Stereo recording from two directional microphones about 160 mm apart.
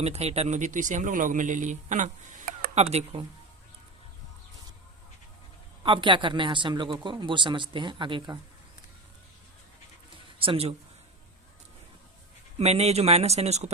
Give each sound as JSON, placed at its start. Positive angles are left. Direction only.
{"t": 0.0, "sound": "speech", "side_deg": -40}
{"t": 5.8, "sound": "speech", "side_deg": -30}
{"t": 10.3, "sound": "speech", "side_deg": -35}
{"t": 12.5, "sound": "speech", "side_deg": -40}